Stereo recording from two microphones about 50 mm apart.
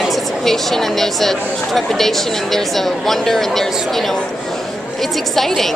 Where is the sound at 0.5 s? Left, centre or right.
Centre.